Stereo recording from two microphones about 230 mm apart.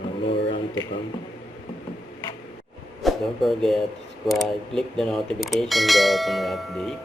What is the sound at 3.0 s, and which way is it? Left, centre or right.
Speech, centre.